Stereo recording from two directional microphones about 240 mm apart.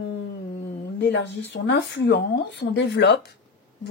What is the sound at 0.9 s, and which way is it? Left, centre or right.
Speech, left.